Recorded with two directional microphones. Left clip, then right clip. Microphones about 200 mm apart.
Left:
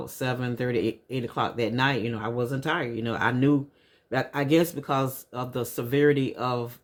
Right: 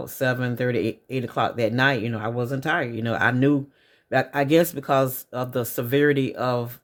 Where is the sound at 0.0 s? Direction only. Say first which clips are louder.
Right 6 dB; 40° right (ahead or behind).